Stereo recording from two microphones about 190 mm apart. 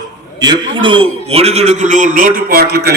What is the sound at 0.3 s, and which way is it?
A man's voice, 20° right (ahead or behind).